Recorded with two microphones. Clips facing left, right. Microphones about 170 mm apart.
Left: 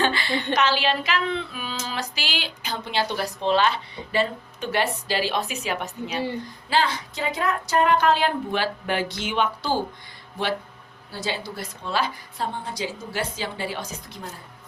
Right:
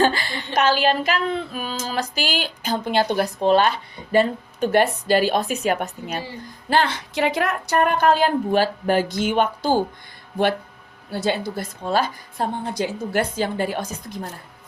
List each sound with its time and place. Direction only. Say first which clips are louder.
0.0 s a sound: right 5 dB; 40° right (ahead or behind)
0.5 s female singing: right 5 dB; 45° right (ahead or behind)
6.7 s female singing: right 3 dB; 60° right (ahead or behind)
11.1 s female singing: right 7 dB; 55° right (ahead or behind)